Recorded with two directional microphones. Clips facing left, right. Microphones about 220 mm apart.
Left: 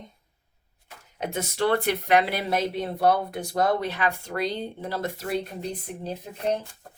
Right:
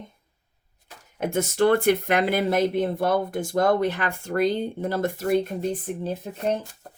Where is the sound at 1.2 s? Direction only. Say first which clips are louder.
Right 5 dB; 50° right (ahead or behind).